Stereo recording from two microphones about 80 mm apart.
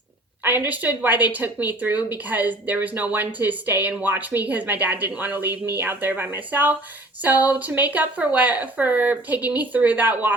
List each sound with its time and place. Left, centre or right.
0.4 s a woman's voice: right